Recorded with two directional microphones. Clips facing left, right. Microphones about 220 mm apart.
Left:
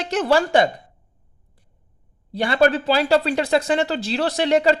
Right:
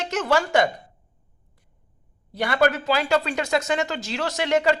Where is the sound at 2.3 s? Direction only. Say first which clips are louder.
Left 3 dB; 30° left (ahead or behind).